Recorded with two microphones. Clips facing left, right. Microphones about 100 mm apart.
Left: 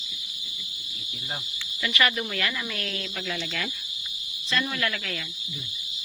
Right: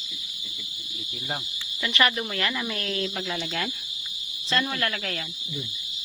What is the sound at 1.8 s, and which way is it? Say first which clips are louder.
Speech: right 1 dB; 25° right (ahead or behind).